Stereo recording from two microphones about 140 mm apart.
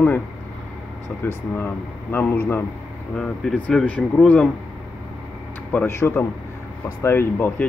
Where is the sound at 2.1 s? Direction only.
15° left (ahead or behind).